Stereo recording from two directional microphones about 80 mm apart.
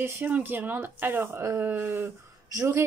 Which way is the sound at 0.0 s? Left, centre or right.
Right.